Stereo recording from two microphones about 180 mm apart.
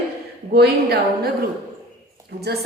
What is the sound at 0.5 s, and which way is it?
Speech, 60° right (ahead or behind).